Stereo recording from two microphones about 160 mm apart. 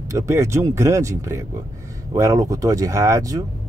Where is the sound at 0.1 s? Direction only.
20° right (ahead or behind).